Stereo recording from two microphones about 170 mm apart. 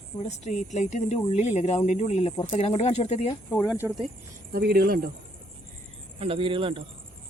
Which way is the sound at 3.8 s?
10° right (ahead or behind).